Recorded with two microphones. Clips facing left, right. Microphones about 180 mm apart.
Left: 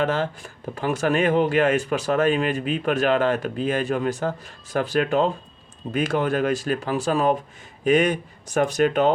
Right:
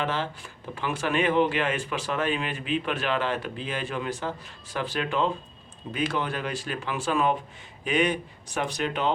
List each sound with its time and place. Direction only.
0.0 s speech: 45° left (ahead or behind)